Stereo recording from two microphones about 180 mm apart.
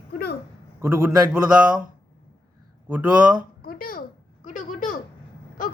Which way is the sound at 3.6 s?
50° left (ahead or behind).